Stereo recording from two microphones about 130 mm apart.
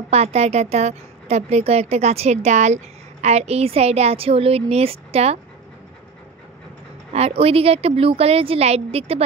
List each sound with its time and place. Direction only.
0.1 s a woman's voice: 55° right (ahead or behind)
7.1 s a woman's voice: 50° right (ahead or behind)